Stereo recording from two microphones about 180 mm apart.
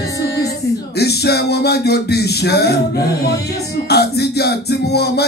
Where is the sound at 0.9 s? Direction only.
65° left (ahead or behind).